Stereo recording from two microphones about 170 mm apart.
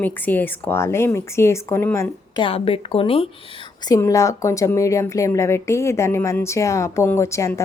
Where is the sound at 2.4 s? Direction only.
35° left (ahead or behind).